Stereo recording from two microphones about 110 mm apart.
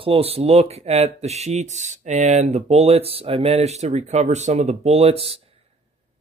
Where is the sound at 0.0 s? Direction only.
60° right (ahead or behind).